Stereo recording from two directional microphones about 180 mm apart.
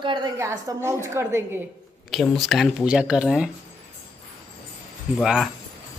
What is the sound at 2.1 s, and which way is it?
Speech, centre (ahead or behind).